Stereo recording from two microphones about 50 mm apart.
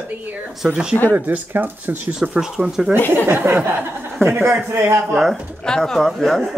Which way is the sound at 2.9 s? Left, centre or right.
Left.